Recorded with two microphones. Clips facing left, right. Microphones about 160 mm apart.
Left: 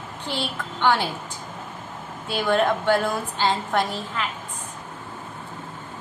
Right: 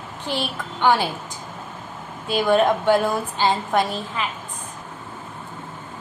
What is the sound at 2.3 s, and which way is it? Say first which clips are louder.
A woman's voice: right 3 dB; 15° right (ahead or behind).